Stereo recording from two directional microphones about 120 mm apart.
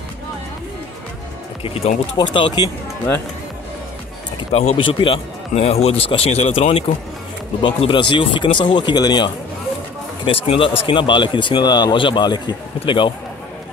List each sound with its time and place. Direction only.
1.6 s speech: 55° left (ahead or behind)
2.1 s speech: 40° left (ahead or behind)
4.4 s speech: 60° left (ahead or behind)
7.6 s speech: 40° left (ahead or behind)
10.2 s speech: 50° left (ahead or behind)